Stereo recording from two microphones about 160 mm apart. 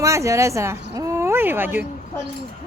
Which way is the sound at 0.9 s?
20° right (ahead or behind).